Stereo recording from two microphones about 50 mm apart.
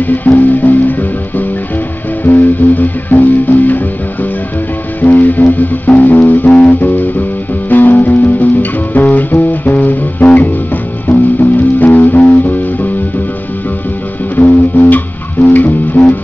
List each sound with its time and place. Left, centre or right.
0.0 s music: left
2.2 s music: left
14.3 s music: left